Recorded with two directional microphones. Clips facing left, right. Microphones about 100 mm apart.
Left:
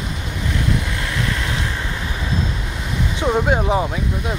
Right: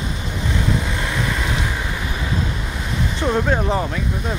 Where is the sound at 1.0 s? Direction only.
15° right (ahead or behind).